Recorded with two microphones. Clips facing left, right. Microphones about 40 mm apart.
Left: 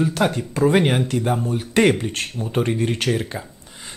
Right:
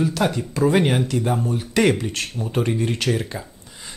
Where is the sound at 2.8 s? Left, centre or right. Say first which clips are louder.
Left 1 dB; left.